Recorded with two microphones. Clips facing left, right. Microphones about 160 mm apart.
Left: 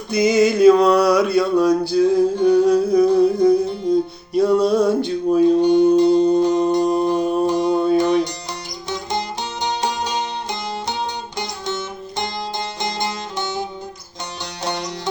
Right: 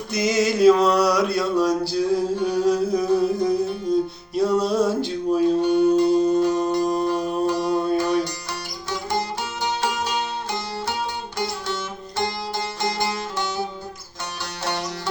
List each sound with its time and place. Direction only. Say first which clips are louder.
0.1 s mantra: left 6 dB; centre (ahead or behind)
3.3 s music: left 7 dB; centre (ahead or behind)
4.4 s male singing: left 4 dB; centre (ahead or behind)
5.5 s music: left 4 dB; 20° left (ahead or behind)
6.4 s mantra: left 4 dB; 20° left (ahead or behind)
7.9 s music: left 5 dB; 20° left (ahead or behind)
9.6 s music: left 2 dB; 20° left (ahead or behind)
11.3 s music: even; 20° left (ahead or behind)